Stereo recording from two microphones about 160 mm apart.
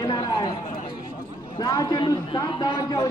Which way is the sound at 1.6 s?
25° left (ahead or behind).